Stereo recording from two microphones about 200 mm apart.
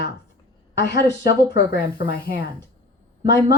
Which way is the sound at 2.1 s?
45° left (ahead or behind).